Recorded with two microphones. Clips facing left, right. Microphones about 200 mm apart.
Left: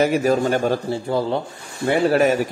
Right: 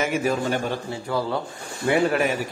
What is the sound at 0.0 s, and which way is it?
Speech, 40° left (ahead or behind).